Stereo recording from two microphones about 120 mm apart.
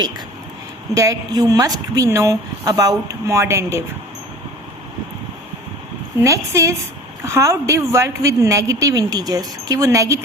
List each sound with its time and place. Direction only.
0.9 s a woman's voice: 30° right (ahead or behind)
6.1 s a woman's voice: 25° right (ahead or behind)